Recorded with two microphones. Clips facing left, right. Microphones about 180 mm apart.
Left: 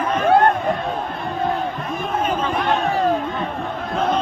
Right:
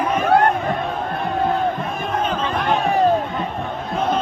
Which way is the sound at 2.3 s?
Centre (ahead or behind).